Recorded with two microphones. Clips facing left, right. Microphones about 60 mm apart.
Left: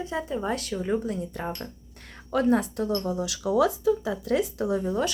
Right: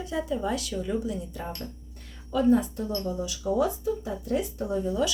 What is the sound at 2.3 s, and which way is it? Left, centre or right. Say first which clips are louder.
Speech: even; left.